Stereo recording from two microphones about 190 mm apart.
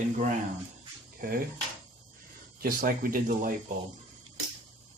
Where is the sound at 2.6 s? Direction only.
50° right (ahead or behind).